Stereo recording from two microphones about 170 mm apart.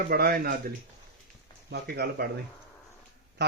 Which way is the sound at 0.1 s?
65° right (ahead or behind).